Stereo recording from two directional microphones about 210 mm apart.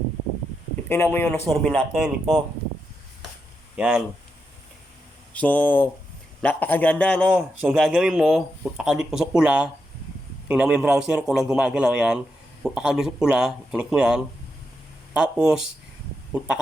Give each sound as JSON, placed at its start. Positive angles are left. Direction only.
{"t": 0.9, "sound": "speech", "side_deg": 10}
{"t": 3.8, "sound": "speech", "side_deg": -5}
{"t": 5.3, "sound": "speech", "side_deg": 5}
{"t": 7.3, "sound": "speech", "side_deg": -5}